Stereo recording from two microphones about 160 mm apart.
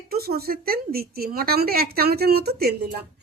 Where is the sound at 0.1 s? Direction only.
75° right (ahead or behind).